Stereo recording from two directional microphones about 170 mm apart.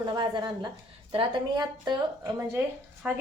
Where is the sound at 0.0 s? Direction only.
25° right (ahead or behind).